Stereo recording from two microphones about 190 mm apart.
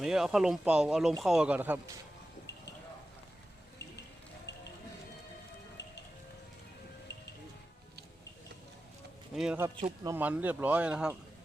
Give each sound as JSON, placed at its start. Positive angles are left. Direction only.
{"t": 0.0, "sound": "speech", "side_deg": 0}
{"t": 4.5, "sound": "music", "side_deg": 65}
{"t": 9.3, "sound": "speech", "side_deg": -5}
{"t": 9.8, "sound": "speech", "side_deg": -20}
{"t": 10.2, "sound": "speech", "side_deg": -10}